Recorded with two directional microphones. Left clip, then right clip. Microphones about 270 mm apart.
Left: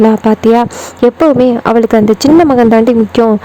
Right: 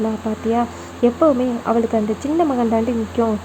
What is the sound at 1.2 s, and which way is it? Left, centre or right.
Speech, left.